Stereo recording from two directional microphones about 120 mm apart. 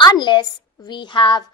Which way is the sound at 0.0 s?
40° left (ahead or behind).